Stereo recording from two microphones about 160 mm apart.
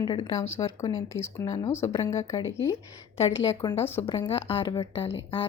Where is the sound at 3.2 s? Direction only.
35° left (ahead or behind).